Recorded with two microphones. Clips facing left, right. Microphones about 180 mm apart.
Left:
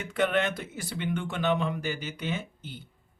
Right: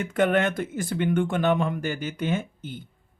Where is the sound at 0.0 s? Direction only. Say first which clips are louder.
Right 4 dB; 50° right (ahead or behind).